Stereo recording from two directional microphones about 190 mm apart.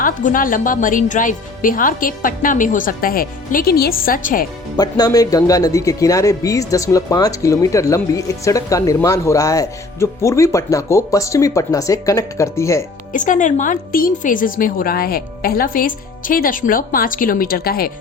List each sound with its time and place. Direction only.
0.0 s a woman's voice: 45° left (ahead or behind)
4.8 s speech: 20° left (ahead or behind)
13.1 s a woman's voice: 40° left (ahead or behind)